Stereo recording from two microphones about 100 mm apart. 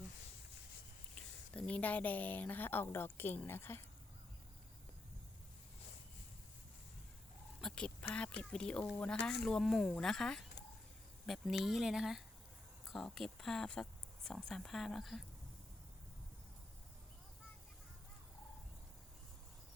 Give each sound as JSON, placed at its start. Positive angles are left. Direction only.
{"t": 1.1, "sound": "a woman's voice", "side_deg": 10}
{"t": 7.6, "sound": "speech", "side_deg": 10}